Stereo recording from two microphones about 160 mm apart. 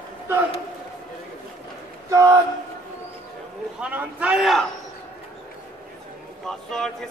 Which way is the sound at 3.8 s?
10° right (ahead or behind).